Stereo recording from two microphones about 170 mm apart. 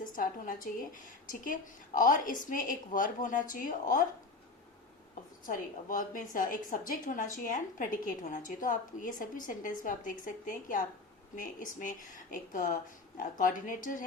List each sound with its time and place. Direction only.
0.0 s a woman's voice: 55° left (ahead or behind)
5.5 s a woman's voice: 55° left (ahead or behind)